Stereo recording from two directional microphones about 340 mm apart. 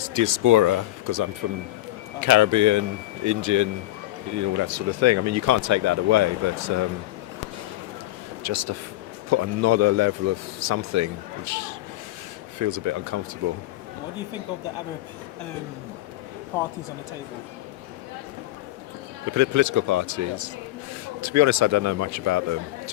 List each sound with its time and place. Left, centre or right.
0.1 s speech: right
8.4 s speech: right
19.3 s speech: right